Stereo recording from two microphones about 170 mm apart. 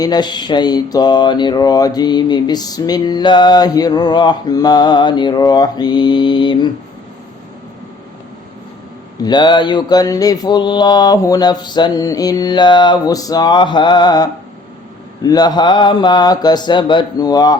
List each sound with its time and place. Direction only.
0.0 s mantra: 25° left (ahead or behind)
9.2 s mantra: 25° left (ahead or behind)